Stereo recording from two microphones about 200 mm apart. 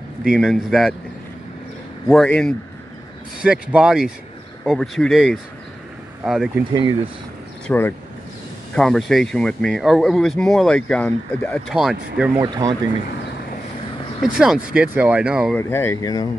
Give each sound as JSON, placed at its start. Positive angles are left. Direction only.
{"t": 0.3, "sound": "speech", "side_deg": 0}
{"t": 2.0, "sound": "speech", "side_deg": 5}
{"t": 3.7, "sound": "speech", "side_deg": -5}
{"t": 7.6, "sound": "speech", "side_deg": 10}
{"t": 12.4, "sound": "speech", "side_deg": -20}
{"t": 14.2, "sound": "speech", "side_deg": 0}
{"t": 15.5, "sound": "speech", "side_deg": 10}